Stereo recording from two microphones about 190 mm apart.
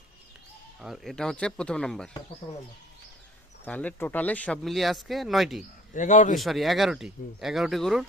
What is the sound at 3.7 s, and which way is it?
Speech, 10° left (ahead or behind).